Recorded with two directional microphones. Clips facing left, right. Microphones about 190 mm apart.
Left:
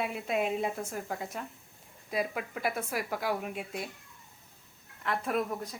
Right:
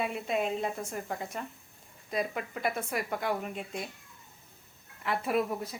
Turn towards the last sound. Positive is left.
turn(degrees=-5)  # may be behind; listen again after turning